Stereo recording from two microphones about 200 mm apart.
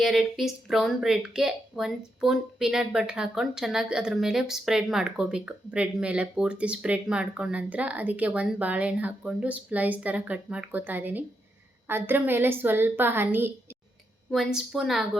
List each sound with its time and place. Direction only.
0.0 s a woman's voice: centre (ahead or behind)